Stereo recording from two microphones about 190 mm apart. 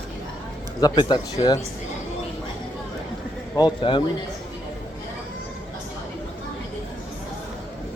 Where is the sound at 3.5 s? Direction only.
25° left (ahead or behind).